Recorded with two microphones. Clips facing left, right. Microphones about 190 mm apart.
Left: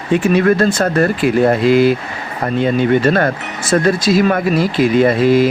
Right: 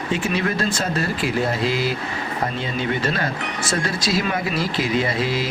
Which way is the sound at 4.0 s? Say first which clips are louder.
Left 9 dB; 50° left (ahead or behind).